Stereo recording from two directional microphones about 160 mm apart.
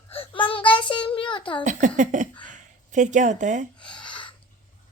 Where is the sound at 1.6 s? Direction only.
50° right (ahead or behind).